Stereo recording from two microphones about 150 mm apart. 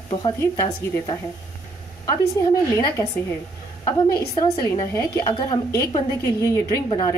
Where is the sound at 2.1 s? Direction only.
20° left (ahead or behind).